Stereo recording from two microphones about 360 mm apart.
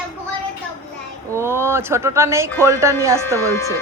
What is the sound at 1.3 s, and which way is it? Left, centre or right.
A woman's voice, centre.